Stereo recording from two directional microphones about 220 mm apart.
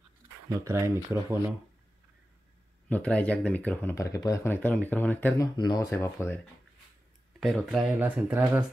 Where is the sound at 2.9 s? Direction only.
5° left (ahead or behind).